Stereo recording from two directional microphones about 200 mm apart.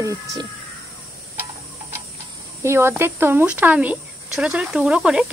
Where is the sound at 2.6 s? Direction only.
10° right (ahead or behind).